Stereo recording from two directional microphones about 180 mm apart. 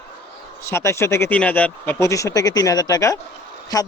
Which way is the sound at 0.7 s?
15° left (ahead or behind).